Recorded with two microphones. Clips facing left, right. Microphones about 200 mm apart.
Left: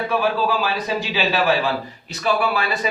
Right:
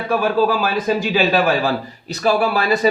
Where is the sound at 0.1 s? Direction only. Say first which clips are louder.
Right 6 dB; 45° right (ahead or behind).